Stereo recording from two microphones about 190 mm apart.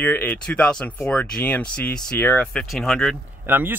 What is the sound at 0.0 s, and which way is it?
Speech, 10° left (ahead or behind).